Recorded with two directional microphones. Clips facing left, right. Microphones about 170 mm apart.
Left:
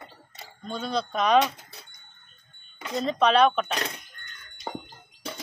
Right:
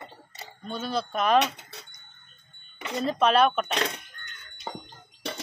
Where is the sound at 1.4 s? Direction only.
70° right (ahead or behind).